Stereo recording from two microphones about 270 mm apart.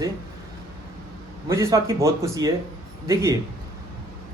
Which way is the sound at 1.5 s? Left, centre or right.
Centre.